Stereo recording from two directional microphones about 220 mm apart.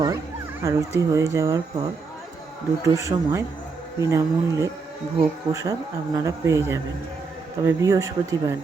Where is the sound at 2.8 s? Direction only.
15° right (ahead or behind).